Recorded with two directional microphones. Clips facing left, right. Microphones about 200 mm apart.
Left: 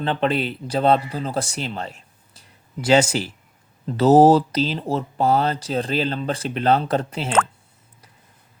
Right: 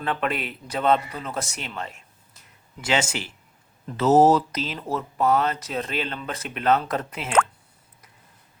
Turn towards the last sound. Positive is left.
turn(degrees=30)  # may be behind; listen again after turning